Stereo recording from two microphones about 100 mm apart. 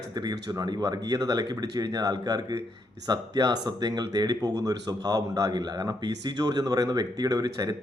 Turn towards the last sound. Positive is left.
turn(degrees=-40)  # may be behind; listen again after turning